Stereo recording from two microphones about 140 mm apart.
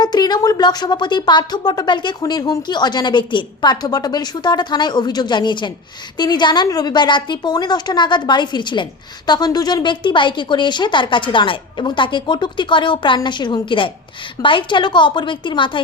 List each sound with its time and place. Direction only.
0.0 s a woman's voice: 30° left (ahead or behind)